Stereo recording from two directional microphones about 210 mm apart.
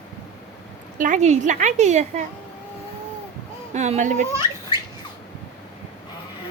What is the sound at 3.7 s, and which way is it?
Speech, 35° right (ahead or behind).